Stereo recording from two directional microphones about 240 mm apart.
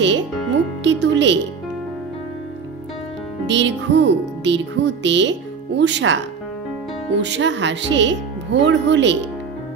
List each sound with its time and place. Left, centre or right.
0.0 s speech: right
3.4 s speech: right